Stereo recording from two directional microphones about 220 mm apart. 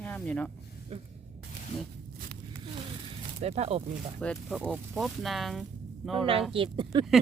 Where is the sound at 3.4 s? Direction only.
30° right (ahead or behind).